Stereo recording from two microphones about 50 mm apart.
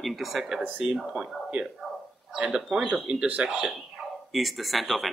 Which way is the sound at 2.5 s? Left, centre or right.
Centre.